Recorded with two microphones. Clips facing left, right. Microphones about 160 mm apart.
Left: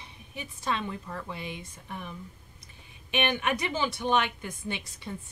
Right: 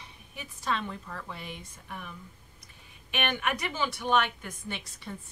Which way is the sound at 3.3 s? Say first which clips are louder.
Left 3 dB; 20° left (ahead or behind).